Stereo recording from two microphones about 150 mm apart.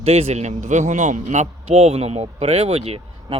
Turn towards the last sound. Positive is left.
turn(degrees=-40)  # may be behind; listen again after turning